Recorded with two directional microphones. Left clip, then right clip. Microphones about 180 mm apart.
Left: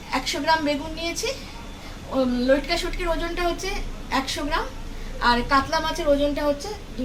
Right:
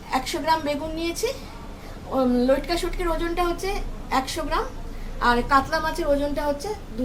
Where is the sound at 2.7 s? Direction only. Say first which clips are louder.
Even; 60° right (ahead or behind).